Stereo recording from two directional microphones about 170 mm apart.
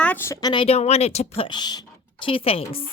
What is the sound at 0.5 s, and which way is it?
Speech, 35° left (ahead or behind).